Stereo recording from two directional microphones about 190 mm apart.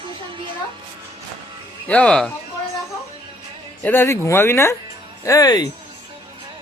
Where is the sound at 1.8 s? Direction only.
5° left (ahead or behind).